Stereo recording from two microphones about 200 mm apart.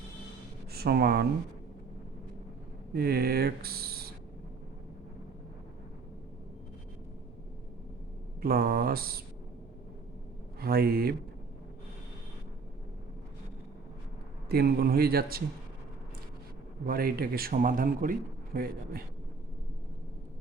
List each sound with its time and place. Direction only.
0.7 s speech: 50° right (ahead or behind)
2.9 s speech: 50° right (ahead or behind)
8.4 s a man's voice: 50° right (ahead or behind)
10.6 s a man's voice: 50° right (ahead or behind)
14.5 s a man's voice: 50° right (ahead or behind)
16.8 s a man's voice: 50° right (ahead or behind)